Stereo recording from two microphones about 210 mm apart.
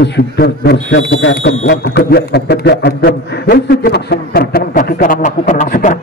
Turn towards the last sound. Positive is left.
turn(degrees=40)  # may be behind; listen again after turning